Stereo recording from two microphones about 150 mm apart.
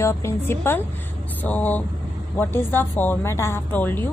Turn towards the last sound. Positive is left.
turn(degrees=15)  # may be behind; listen again after turning